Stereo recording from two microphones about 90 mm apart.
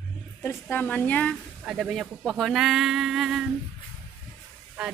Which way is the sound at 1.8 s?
Centre (ahead or behind).